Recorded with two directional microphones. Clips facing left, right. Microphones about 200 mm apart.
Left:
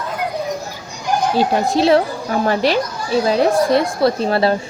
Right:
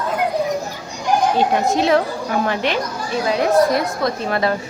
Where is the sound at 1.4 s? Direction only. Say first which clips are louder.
Left 1 dB; 35° left (ahead or behind).